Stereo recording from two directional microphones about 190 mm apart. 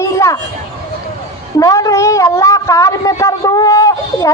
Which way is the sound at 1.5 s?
15° left (ahead or behind).